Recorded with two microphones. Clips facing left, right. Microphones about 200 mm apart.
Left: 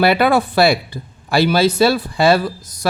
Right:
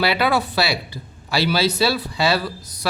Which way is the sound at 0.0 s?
50° left (ahead or behind).